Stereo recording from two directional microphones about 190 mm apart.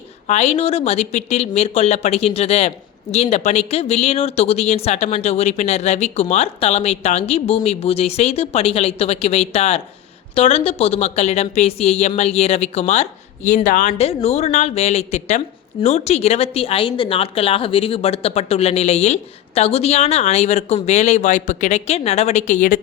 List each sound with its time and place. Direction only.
0.3 s speech: 35° left (ahead or behind)